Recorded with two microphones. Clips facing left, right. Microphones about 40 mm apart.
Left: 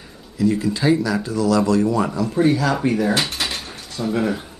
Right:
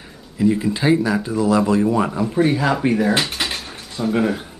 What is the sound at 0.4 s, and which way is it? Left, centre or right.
Speech, right.